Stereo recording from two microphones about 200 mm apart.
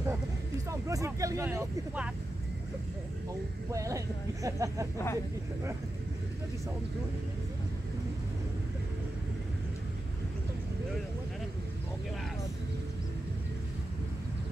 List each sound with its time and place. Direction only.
0.7 s speech: 15° right (ahead or behind)
3.7 s speech: 15° right (ahead or behind)
4.9 s speech: 15° left (ahead or behind)